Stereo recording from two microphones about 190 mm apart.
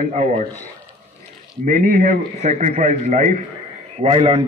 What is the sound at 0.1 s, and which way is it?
Speech, 40° right (ahead or behind).